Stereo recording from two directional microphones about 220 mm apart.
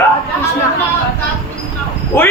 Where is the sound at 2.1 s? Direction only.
10° left (ahead or behind).